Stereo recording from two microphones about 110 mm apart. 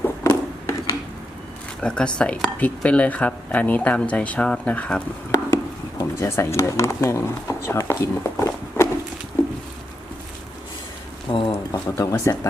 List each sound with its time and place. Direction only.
0.0 s a sound: 25° left (ahead or behind)
1.8 s speech: 10° left (ahead or behind)
6.0 s speech: 25° left (ahead or behind)
11.3 s speech: 50° left (ahead or behind)
11.7 s speech: 30° left (ahead or behind)